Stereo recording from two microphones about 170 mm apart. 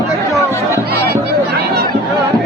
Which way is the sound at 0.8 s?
70° right (ahead or behind).